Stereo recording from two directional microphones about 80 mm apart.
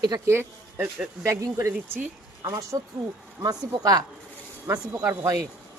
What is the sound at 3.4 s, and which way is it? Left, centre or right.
A man's voice, right.